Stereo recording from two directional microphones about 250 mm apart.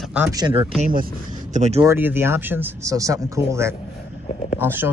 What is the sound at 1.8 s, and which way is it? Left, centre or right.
Speech, centre.